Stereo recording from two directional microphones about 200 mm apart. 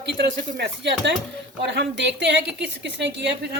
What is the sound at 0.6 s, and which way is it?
A woman's voice, 60° right (ahead or behind).